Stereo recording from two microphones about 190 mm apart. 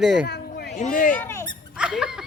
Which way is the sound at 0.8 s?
45° left (ahead or behind).